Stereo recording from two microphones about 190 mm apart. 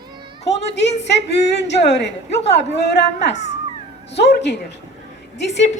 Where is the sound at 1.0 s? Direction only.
65° left (ahead or behind).